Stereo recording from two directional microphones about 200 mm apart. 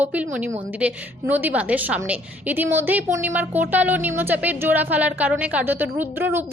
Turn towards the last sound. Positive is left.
turn(degrees=-10)  # may be behind; listen again after turning